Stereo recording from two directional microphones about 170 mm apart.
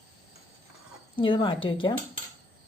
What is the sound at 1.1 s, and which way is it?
Speech, 30° left (ahead or behind).